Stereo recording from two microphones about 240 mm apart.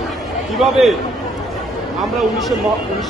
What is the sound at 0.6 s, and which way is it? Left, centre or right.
Speech, centre.